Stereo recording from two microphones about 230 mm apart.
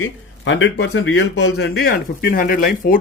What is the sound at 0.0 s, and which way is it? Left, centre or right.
A man's voice, left.